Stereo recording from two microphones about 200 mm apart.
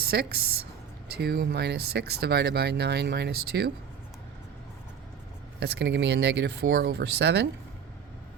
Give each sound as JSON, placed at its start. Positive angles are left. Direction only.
{"t": 0.0, "sound": "speech", "side_deg": -50}
{"t": 5.5, "sound": "speech", "side_deg": -55}